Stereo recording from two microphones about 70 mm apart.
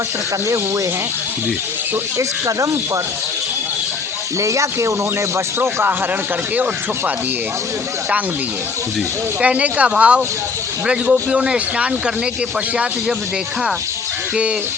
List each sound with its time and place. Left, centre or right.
2.1 s speech: right
4.4 s speech: right
9.4 s a man's voice: centre